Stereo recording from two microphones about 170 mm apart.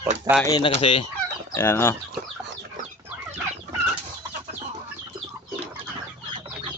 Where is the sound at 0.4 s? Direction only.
25° left (ahead or behind).